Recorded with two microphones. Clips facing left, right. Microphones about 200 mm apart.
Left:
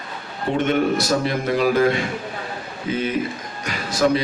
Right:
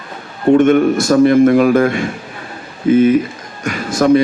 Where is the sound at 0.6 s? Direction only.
50° right (ahead or behind).